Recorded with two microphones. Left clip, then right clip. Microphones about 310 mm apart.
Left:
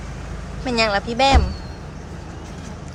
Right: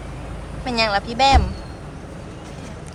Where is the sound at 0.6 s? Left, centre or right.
Centre.